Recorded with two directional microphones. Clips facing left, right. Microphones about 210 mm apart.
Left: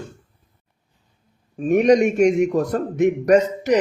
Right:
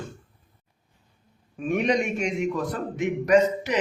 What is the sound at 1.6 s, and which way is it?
A man's voice, 45° left (ahead or behind).